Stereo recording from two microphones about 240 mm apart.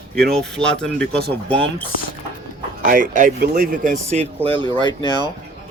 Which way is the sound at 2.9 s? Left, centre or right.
Right.